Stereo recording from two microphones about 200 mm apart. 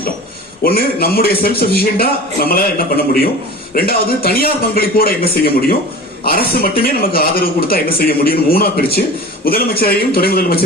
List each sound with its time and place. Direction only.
0.6 s a man's voice: 50° left (ahead or behind)